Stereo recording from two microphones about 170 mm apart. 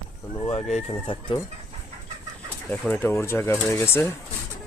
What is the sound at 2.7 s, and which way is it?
Speech, 10° left (ahead or behind).